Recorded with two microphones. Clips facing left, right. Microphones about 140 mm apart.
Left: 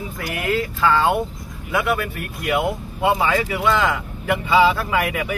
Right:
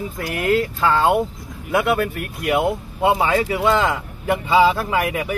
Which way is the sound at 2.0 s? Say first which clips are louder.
Right 4 dB; 40° right (ahead or behind).